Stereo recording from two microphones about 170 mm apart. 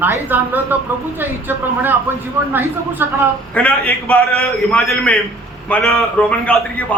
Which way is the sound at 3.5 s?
10° left (ahead or behind).